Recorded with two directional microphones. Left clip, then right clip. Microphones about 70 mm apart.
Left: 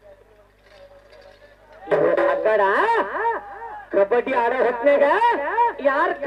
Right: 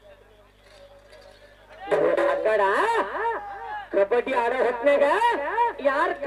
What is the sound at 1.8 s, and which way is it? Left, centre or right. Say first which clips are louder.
Music: left 3 dB; left.